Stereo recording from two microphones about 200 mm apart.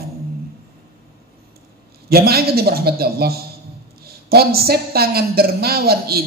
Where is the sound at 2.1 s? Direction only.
50° right (ahead or behind).